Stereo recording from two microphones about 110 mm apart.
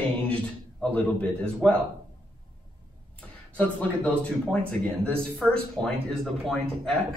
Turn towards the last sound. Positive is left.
turn(degrees=0)  # may be behind; listen again after turning